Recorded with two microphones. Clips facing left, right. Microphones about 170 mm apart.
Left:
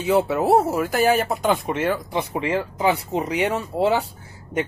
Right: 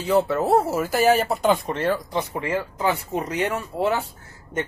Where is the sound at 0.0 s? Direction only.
10° left (ahead or behind).